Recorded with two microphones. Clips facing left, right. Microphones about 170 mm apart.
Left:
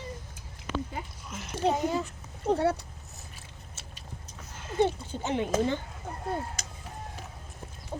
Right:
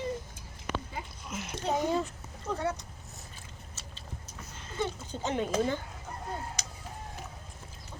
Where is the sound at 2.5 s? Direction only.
30° left (ahead or behind).